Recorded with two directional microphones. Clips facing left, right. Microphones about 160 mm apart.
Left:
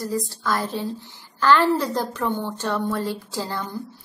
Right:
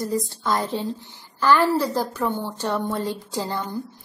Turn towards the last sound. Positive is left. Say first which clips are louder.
# right 1 dB
turn(degrees=-15)  # may be behind; listen again after turning